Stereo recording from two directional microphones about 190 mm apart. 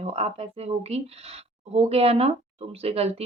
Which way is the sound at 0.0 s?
35° right (ahead or behind).